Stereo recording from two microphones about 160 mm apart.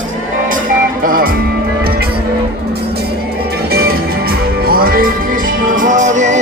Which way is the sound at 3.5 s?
75° right (ahead or behind).